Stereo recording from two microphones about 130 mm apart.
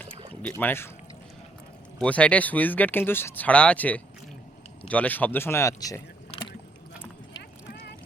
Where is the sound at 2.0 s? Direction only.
10° left (ahead or behind); by 6.0 s 25° left (ahead or behind).